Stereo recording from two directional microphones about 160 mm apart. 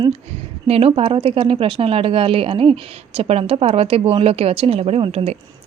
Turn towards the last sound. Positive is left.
turn(degrees=-40)  # may be behind; listen again after turning